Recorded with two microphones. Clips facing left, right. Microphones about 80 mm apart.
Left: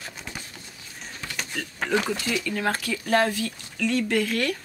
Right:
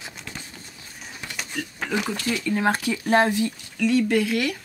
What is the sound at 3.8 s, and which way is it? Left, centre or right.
Speech, centre.